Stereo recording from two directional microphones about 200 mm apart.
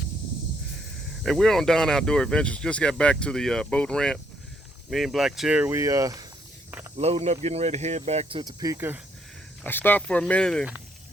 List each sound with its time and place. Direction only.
1.2 s speech: centre (ahead or behind); by 6.2 s 15° right (ahead or behind)
6.9 s speech: 30° right (ahead or behind); by 9.0 s 15° right (ahead or behind)
9.6 s speech: 10° left (ahead or behind)